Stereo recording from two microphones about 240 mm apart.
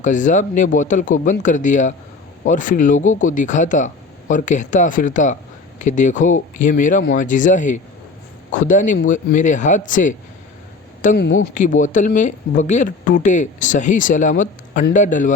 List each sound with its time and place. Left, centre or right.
0.0 s speech: left